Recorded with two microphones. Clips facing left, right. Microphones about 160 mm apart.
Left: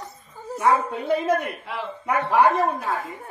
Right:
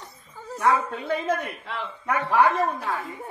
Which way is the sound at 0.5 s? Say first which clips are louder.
Left 2 dB; 10° left (ahead or behind).